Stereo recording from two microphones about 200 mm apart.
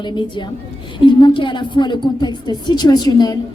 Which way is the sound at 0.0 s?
25° left (ahead or behind).